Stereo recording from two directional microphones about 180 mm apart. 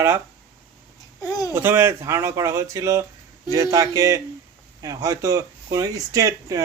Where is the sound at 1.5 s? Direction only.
15° right (ahead or behind).